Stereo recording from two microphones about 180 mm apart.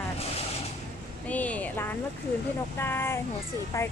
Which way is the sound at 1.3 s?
10° left (ahead or behind).